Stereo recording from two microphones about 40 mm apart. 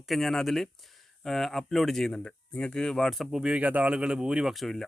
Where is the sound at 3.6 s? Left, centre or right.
Right.